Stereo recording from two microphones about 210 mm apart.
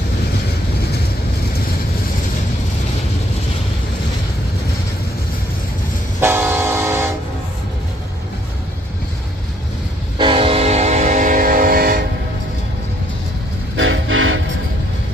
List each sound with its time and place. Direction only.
6.2 s vehicle: 10° right (ahead or behind)
10.1 s train: 25° right (ahead or behind); by 12.0 s 45° right (ahead or behind)
13.7 s vehicle: 65° right (ahead or behind)